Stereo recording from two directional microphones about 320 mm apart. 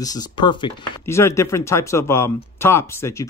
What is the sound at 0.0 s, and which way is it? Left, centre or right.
Speech, centre.